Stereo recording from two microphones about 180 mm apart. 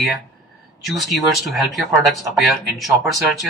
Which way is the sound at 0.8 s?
Centre (ahead or behind).